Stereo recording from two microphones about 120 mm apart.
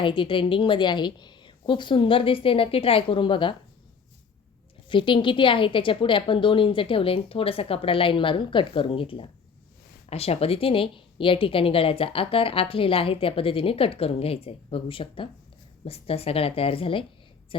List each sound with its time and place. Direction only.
0.0 s a woman's voice: 45° left (ahead or behind)
4.9 s a woman's voice: 45° left (ahead or behind)